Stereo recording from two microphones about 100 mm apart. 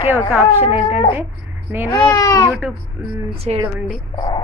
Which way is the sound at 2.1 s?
35° left (ahead or behind).